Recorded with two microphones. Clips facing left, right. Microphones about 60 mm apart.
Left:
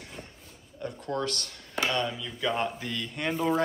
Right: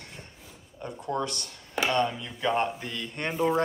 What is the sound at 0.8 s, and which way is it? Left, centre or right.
Speech, centre.